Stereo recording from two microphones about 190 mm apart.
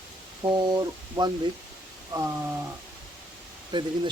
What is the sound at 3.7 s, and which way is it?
Speech, 25° right (ahead or behind).